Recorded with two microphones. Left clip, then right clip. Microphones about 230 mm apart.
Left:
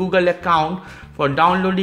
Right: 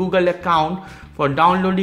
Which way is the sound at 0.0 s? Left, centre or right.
Centre.